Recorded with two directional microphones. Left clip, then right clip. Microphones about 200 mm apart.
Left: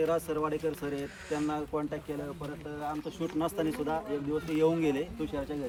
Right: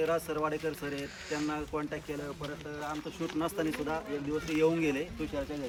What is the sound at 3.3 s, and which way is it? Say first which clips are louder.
Speech: left 1 dB; 10° left (ahead or behind).